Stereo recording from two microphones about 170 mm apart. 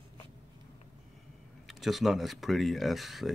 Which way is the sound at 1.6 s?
Centre (ahead or behind).